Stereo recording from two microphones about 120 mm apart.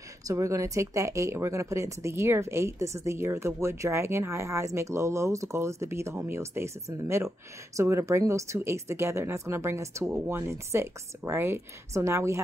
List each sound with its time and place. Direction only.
0.3 s speech: 25° right (ahead or behind)